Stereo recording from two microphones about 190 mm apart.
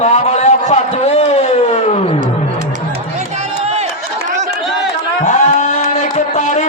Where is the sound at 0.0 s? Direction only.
35° left (ahead or behind).